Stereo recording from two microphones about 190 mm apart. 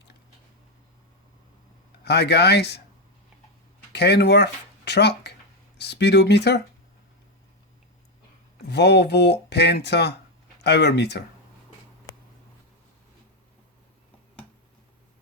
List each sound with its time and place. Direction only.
2.0 s speech: 60° left (ahead or behind)
3.9 s speech: 60° left (ahead or behind)
8.7 s speech: 60° left (ahead or behind)